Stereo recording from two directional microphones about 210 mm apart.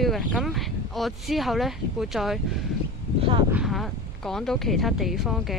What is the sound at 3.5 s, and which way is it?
Speech, centre (ahead or behind).